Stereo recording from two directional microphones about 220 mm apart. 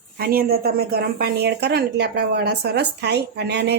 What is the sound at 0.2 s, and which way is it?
A woman's voice, 45° right (ahead or behind).